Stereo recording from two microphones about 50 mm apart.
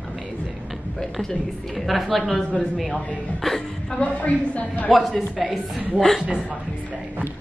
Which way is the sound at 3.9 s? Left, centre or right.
Left.